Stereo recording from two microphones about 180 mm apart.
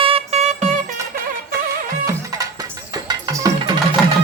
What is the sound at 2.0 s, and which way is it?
Music, 20° right (ahead or behind).